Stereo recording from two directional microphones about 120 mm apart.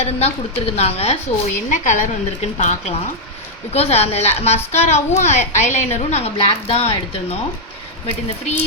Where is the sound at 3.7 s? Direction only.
60° left (ahead or behind).